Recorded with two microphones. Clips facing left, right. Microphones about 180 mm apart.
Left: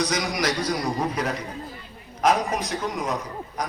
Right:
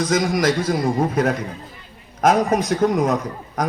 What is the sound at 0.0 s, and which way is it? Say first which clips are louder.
A man's voice: right 6 dB; 50° right (ahead or behind).